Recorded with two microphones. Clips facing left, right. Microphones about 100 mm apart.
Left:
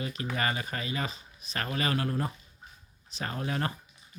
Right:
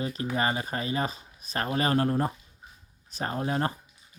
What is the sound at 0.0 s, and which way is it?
Speech, 30° right (ahead or behind).